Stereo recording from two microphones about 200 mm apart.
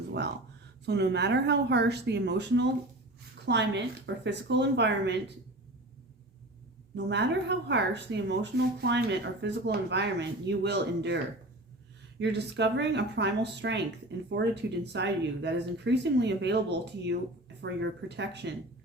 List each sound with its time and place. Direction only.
0.1 s speech: 55° right (ahead or behind)
6.9 s speech: 60° right (ahead or behind)
12.2 s speech: 60° right (ahead or behind)